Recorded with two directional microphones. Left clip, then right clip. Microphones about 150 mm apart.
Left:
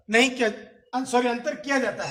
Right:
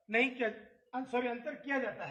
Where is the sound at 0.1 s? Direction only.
40° left (ahead or behind); by 2.0 s 25° left (ahead or behind).